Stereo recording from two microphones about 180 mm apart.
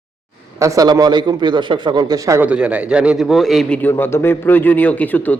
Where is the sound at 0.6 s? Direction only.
20° right (ahead or behind).